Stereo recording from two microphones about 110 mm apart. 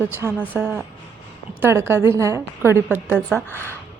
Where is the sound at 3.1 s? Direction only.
15° left (ahead or behind).